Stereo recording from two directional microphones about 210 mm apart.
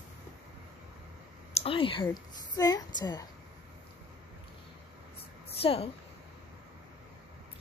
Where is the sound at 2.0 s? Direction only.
15° left (ahead or behind).